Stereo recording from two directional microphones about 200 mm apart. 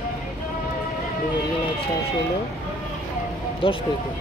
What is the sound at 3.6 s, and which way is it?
Speech, 25° left (ahead or behind).